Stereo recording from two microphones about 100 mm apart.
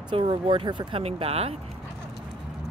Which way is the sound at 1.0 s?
85° right.